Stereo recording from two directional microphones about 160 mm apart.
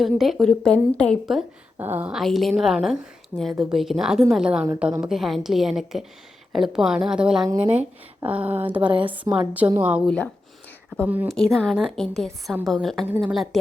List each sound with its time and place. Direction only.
0.0 s a woman's voice: centre (ahead or behind)
1.8 s a woman's voice: 10° right (ahead or behind)
7.4 s speech: 25° right (ahead or behind)
7.7 s speech: 10° right (ahead or behind)
8.8 s a woman's voice: 30° right (ahead or behind)
9.1 s speech: 10° right (ahead or behind)
11.0 s speech: 10° right (ahead or behind)
11.3 s a woman's voice: centre (ahead or behind)
13.1 s speech: 10° right (ahead or behind)
13.3 s a woman's voice: centre (ahead or behind)